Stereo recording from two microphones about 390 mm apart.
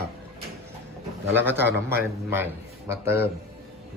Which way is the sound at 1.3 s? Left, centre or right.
Centre.